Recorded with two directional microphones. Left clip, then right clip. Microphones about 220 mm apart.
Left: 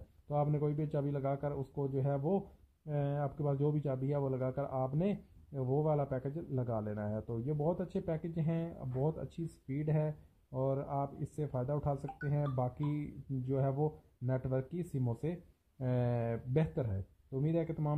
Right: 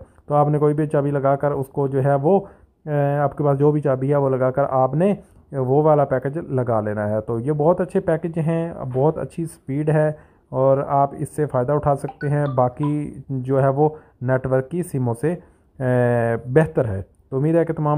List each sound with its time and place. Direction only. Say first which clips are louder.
0.3 s a man's voice: right 18 dB; 10° right (ahead or behind)
12.7 s speech: right 16 dB; 55° right (ahead or behind)
13.5 s a man's voice: right 18 dB; 10° right (ahead or behind)
15.8 s a man's voice: right 18 dB; 10° right (ahead or behind)
17.4 s speech: right 17 dB; 5° right (ahead or behind)